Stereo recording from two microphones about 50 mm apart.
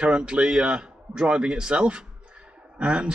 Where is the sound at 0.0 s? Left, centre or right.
Right.